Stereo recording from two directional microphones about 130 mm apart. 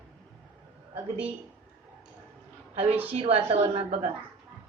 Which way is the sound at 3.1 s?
50° right (ahead or behind).